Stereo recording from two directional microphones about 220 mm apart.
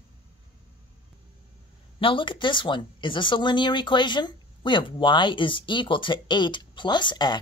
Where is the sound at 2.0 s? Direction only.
25° left (ahead or behind).